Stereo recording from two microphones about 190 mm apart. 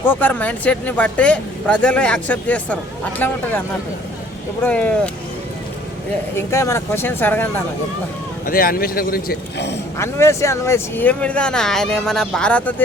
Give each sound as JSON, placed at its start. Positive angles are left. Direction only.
{"t": 0.0, "sound": "speech", "side_deg": 10}
{"t": 4.6, "sound": "speech", "side_deg": 5}
{"t": 6.3, "sound": "speech", "side_deg": 15}
{"t": 8.4, "sound": "speech", "side_deg": 50}
{"t": 10.0, "sound": "speech", "side_deg": 15}